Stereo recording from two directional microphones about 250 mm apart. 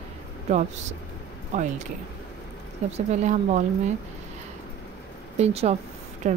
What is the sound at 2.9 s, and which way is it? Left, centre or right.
Speech, right.